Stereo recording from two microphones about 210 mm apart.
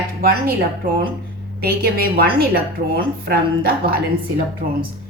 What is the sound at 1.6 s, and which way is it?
A woman's voice, 45° right (ahead or behind).